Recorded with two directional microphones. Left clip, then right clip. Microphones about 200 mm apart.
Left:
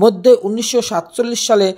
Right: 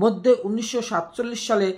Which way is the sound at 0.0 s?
35° left (ahead or behind).